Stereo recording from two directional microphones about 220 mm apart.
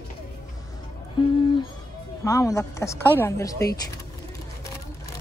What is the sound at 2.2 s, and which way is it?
A woman's voice, 15° left (ahead or behind).